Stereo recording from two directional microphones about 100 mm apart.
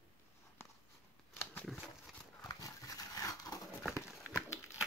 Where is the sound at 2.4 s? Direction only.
35° left (ahead or behind).